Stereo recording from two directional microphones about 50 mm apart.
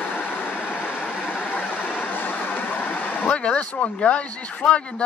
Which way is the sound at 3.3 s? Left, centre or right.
Left.